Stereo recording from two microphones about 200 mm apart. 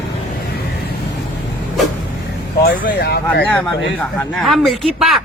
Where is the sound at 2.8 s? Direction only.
55° left (ahead or behind).